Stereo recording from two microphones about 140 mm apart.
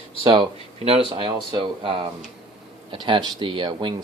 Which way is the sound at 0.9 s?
40° right (ahead or behind).